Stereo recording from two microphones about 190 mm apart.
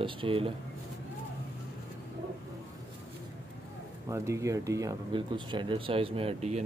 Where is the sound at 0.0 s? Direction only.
30° right (ahead or behind).